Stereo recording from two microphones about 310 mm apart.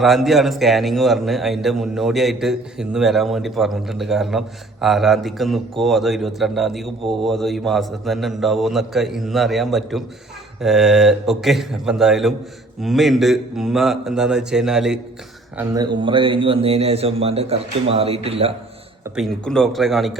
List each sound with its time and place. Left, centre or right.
0.0 s a man's voice: centre
19.1 s a man's voice: centre